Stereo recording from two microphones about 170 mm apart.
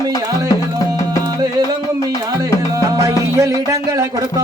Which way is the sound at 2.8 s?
20° right (ahead or behind).